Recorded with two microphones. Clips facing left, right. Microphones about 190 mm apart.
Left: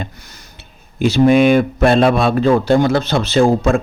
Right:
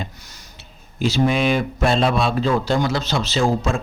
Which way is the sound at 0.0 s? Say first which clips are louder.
Left 3 dB; 55° left (ahead or behind).